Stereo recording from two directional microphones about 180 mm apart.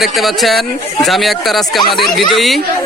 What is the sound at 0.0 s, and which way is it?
Speech, centre (ahead or behind).